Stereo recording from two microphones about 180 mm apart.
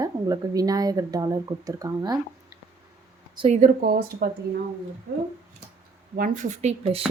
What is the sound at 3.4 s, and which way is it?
Speech, 40° right (ahead or behind).